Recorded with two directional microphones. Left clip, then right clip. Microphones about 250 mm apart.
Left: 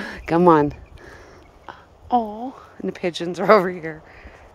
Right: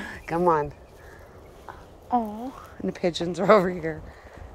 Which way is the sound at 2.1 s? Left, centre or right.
Left.